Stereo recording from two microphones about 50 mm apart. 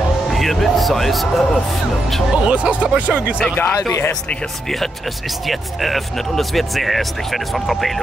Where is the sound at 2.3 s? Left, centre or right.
Right.